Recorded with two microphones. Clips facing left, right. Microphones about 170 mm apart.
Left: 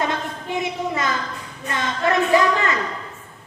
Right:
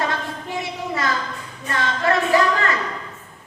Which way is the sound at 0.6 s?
20° left (ahead or behind).